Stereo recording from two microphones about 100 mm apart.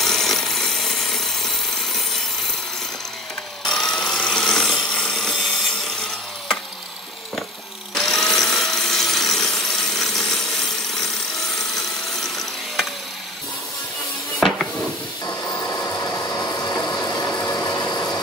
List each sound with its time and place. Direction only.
0.0 s jackhammer: 5° left (ahead or behind)
3.6 s tools: 5° left (ahead or behind)
7.9 s tools: 5° left (ahead or behind)
12.2 s a sound: 5° left (ahead or behind)
15.6 s train: 30° left (ahead or behind)
17.0 s ratchet: 35° left (ahead or behind)
17.5 s a sound: 35° left (ahead or behind)